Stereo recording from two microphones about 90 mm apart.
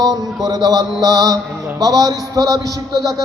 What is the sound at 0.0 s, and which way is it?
Mantra, 45° right (ahead or behind).